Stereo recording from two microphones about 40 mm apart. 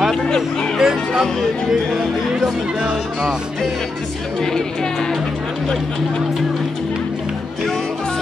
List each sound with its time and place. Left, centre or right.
0.1 s speech: centre
0.7 s speech: centre
4.4 s speech: centre